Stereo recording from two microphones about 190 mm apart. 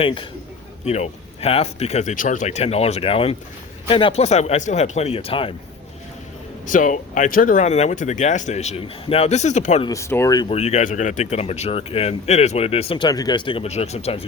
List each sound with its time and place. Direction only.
0.0 s a man's voice: 25° left (ahead or behind)
6.7 s speech: 40° left (ahead or behind)
9.8 s speech: 15° left (ahead or behind)
10.5 s speech: 35° left (ahead or behind)